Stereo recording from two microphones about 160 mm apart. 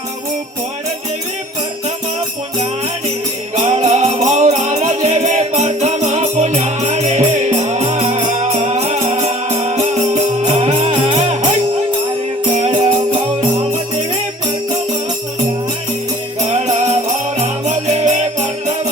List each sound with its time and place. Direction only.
3.5 s music: 45° right (ahead or behind)
12.6 s music: 30° right (ahead or behind)
16.5 s music: 45° right (ahead or behind)